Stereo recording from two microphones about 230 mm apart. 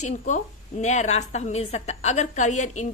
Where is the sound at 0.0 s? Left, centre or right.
Left.